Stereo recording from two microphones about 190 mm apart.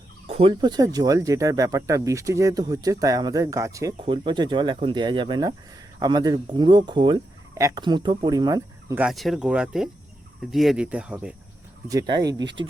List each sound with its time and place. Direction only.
0.3 s speech: 30° right (ahead or behind)
4.0 s speech: 25° right (ahead or behind)
9.0 s speech: centre (ahead or behind)
11.9 s speech: 20° right (ahead or behind)